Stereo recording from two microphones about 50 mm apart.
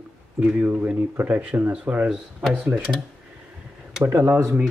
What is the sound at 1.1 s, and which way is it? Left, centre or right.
Speech, right.